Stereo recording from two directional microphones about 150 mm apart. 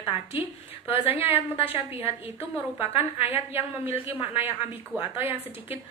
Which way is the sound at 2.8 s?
15° right (ahead or behind).